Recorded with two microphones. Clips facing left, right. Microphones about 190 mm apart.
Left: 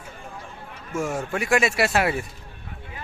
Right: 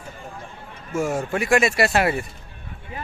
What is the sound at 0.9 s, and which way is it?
Speech, centre (ahead or behind).